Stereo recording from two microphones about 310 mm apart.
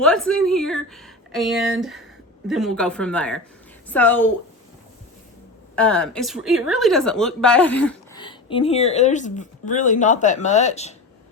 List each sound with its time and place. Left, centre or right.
0.0 s speech: centre
5.7 s speech: centre
8.2 s speech: centre